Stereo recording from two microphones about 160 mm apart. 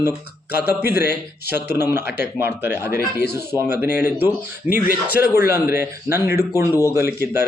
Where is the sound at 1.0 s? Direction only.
90° left.